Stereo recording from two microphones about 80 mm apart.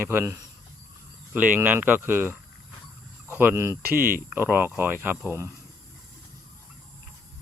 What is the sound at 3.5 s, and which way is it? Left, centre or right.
Speech, right.